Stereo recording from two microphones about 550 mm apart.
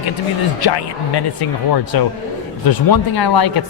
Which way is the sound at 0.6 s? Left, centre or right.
Left.